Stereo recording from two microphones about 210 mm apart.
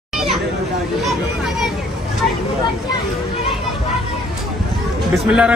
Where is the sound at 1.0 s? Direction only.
Centre (ahead or behind).